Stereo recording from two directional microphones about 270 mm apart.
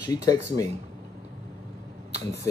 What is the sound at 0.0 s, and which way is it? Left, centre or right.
Speech, centre.